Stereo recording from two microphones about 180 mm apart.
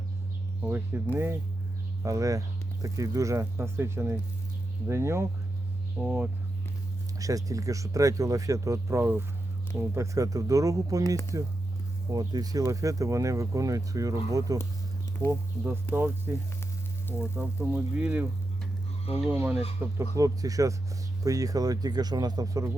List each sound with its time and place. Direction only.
0.6 s speech: 10° right (ahead or behind)
7.2 s speech: 20° right (ahead or behind)